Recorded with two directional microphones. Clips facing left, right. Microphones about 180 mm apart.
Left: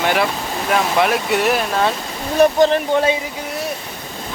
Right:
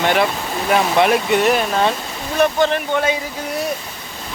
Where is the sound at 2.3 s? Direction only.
35° left (ahead or behind).